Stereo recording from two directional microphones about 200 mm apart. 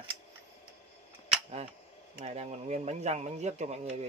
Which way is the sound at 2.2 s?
35° right (ahead or behind).